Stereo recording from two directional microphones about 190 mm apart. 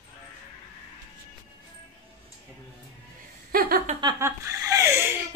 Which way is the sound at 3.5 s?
50° right (ahead or behind).